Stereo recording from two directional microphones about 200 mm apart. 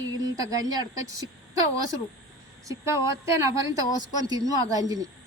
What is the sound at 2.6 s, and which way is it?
Speech, 15° right (ahead or behind).